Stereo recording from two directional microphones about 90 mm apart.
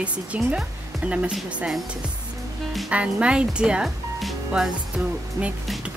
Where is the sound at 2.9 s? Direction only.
15° right (ahead or behind).